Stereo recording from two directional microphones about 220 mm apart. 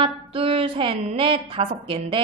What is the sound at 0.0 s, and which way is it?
Music, 25° right (ahead or behind).